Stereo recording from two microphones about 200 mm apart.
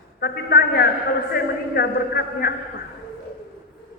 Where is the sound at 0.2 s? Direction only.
50° left (ahead or behind).